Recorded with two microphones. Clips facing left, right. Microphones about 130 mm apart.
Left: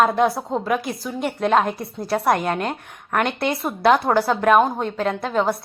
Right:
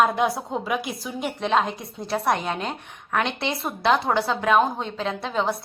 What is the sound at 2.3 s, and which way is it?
Speech, 50° left (ahead or behind).